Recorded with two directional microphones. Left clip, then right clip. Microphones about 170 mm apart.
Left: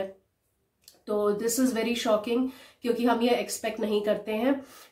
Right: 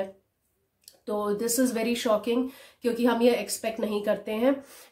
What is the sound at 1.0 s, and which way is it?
Speech, 30° right (ahead or behind).